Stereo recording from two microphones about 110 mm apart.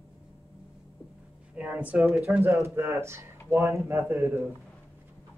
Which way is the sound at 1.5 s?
10° right (ahead or behind).